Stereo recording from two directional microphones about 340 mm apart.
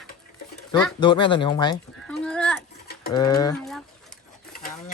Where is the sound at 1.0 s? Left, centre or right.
Centre.